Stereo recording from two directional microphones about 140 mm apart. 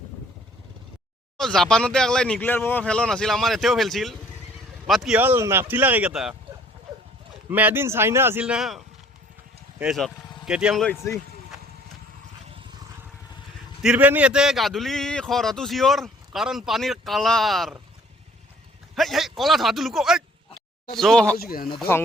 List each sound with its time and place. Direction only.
1.4 s speech: 5° left (ahead or behind)
5.2 s a man's voice: 15° right (ahead or behind)
7.5 s a man's voice: 15° right (ahead or behind)
9.8 s speech: 5° right (ahead or behind)
13.8 s speech: 10° right (ahead or behind)
18.9 s speech: centre (ahead or behind)
21.3 s speech: 90° left